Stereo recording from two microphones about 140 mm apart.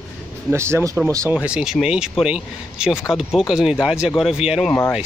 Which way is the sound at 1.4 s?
5° right (ahead or behind).